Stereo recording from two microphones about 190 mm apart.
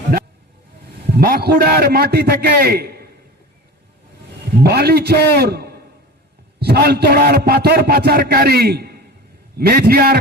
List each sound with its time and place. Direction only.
1.1 s a man's voice: 50° right (ahead or behind)
4.6 s a man's voice: 55° right (ahead or behind)